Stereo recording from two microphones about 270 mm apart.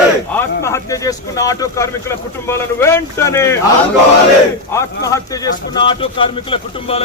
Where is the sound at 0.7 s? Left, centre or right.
Centre.